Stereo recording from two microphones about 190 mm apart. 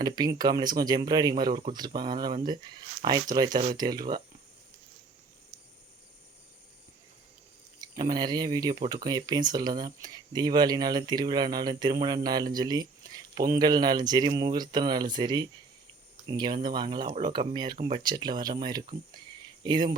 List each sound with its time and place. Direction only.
0.0 s speech: 20° right (ahead or behind)
7.8 s speech: 20° right (ahead or behind)